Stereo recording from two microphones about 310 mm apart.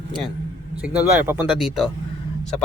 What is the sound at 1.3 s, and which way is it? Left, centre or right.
Speech, centre.